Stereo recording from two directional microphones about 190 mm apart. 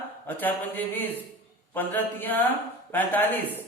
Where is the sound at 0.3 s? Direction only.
10° left (ahead or behind).